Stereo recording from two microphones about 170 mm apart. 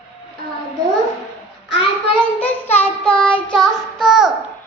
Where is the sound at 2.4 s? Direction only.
10° left (ahead or behind).